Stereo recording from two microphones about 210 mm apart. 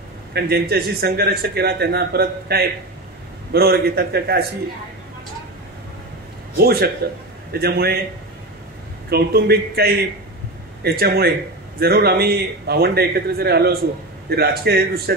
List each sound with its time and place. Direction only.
0.3 s speech: 50° right (ahead or behind)
6.5 s speech: 45° right (ahead or behind)
9.1 s speech: 50° right (ahead or behind)